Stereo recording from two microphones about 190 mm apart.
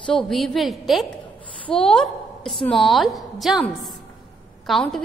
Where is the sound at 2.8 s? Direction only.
Centre (ahead or behind).